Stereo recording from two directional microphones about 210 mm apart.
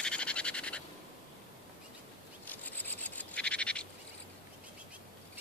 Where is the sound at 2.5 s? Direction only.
10° left (ahead or behind).